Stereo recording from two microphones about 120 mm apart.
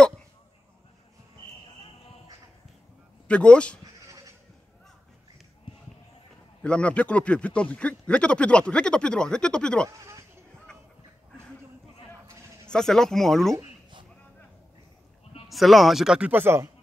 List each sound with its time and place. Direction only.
3.3 s speech: 10° left (ahead or behind)
6.6 s speech: 10° left (ahead or behind)
9.8 s a sound: 25° right (ahead or behind)
12.6 s a man's voice: 5° left (ahead or behind)
15.4 s a man's voice: centre (ahead or behind); by 16.7 s 20° right (ahead or behind)